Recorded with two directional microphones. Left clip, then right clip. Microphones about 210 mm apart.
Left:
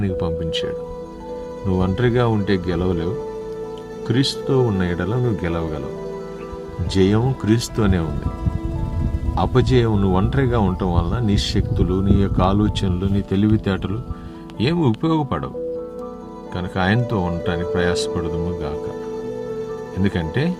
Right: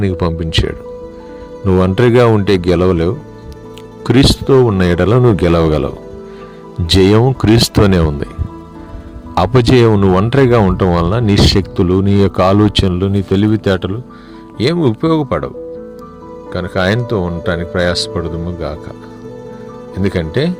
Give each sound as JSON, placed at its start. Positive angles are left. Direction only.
{"t": 0.0, "sound": "speech", "side_deg": -40}
{"t": 6.8, "sound": "speech", "side_deg": -40}
{"t": 9.3, "sound": "speech", "side_deg": -40}
{"t": 16.5, "sound": "speech", "side_deg": -25}
{"t": 20.0, "sound": "speech", "side_deg": -25}